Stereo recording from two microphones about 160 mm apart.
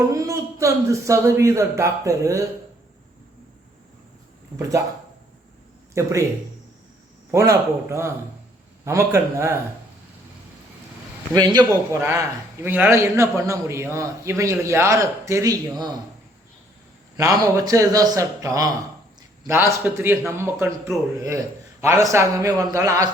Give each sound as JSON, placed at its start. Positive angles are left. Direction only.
{"t": 0.1, "sound": "a man's voice", "side_deg": -20}
{"t": 5.9, "sound": "a man's voice", "side_deg": -20}
{"t": 7.3, "sound": "a man's voice", "side_deg": -15}
{"t": 11.3, "sound": "a man's voice", "side_deg": -25}
{"t": 17.2, "sound": "a man's voice", "side_deg": -20}